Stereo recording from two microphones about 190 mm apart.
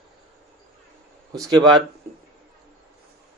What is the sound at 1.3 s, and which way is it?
Speech, 20° right (ahead or behind).